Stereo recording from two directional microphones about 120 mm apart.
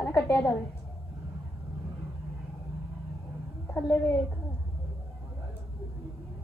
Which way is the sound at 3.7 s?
20° left (ahead or behind).